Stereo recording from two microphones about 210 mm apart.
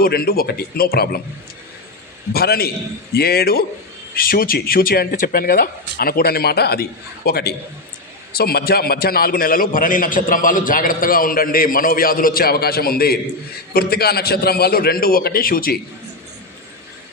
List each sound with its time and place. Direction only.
0.0 s a man's voice: 45° left (ahead or behind)
2.3 s a man's voice: 45° left (ahead or behind)